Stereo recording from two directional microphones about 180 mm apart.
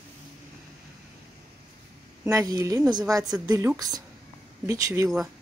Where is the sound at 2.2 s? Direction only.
20° right (ahead or behind).